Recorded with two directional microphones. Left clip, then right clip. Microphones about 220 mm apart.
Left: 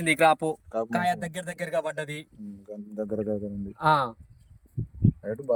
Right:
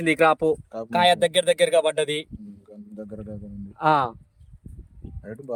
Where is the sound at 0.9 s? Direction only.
35° right (ahead or behind).